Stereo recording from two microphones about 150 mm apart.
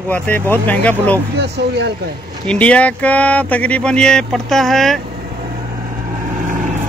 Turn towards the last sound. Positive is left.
turn(degrees=0)  # may be behind; listen again after turning